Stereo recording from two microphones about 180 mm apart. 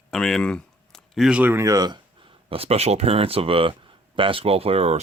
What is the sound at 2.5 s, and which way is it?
Speech, 35° right (ahead or behind).